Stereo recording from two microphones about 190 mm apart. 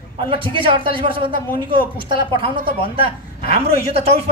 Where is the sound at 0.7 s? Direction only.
25° right (ahead or behind).